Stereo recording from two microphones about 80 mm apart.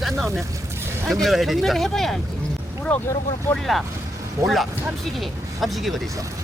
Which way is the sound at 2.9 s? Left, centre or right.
Centre.